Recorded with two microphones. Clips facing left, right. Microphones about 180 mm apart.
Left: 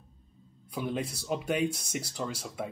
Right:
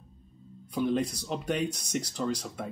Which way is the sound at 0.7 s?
5° left (ahead or behind).